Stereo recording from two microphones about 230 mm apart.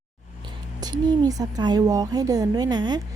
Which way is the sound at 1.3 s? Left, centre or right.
Centre.